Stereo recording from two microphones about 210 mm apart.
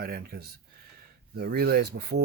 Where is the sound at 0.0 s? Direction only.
50° right (ahead or behind).